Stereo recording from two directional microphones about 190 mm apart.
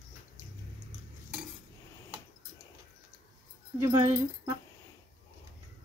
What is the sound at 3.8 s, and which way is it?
Speech, 15° right (ahead or behind).